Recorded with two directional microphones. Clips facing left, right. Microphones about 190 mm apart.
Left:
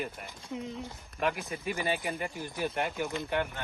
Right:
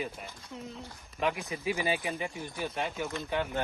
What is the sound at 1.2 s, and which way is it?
Speech, centre (ahead or behind).